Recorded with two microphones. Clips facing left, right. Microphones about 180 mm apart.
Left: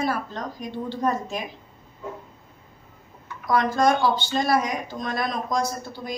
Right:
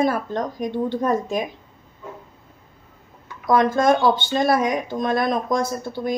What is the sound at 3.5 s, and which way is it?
Speech, 50° right (ahead or behind).